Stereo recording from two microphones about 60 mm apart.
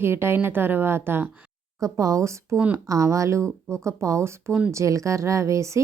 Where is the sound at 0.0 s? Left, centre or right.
Right.